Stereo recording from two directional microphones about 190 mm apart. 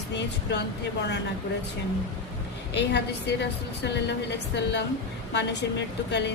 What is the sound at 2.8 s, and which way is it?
A woman's voice, 60° left (ahead or behind).